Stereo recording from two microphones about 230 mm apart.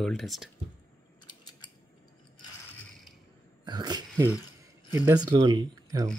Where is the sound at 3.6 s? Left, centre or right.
Centre.